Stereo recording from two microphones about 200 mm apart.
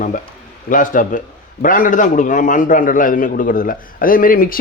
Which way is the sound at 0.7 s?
40° left (ahead or behind).